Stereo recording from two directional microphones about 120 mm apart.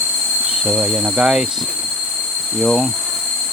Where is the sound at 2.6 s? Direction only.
5° left (ahead or behind).